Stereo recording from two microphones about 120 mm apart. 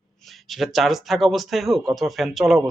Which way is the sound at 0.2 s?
Centre (ahead or behind).